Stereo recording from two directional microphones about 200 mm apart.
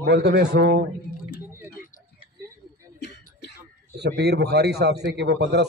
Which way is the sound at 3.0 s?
55° left (ahead or behind).